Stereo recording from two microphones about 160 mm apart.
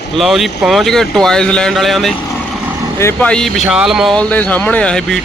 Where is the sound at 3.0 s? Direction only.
15° left (ahead or behind).